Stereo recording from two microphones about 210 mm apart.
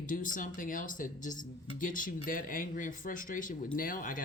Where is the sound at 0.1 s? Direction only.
40° left (ahead or behind).